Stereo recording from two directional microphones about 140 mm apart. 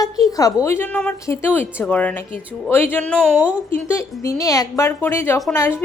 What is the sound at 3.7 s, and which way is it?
A woman's voice, 20° left (ahead or behind).